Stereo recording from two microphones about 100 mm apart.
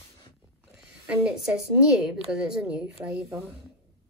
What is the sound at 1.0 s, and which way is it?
A woman's voice, 15° right (ahead or behind).